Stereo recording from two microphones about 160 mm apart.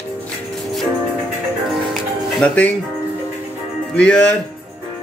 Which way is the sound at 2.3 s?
10° left (ahead or behind).